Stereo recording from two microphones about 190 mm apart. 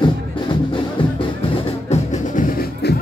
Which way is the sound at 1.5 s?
35° left (ahead or behind).